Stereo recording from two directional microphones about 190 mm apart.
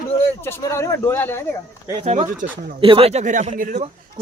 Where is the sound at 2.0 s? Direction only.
35° right (ahead or behind).